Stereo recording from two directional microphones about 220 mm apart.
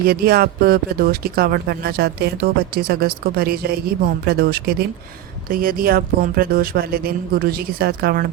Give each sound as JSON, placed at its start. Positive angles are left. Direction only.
{"t": 0.1, "sound": "speech", "side_deg": -45}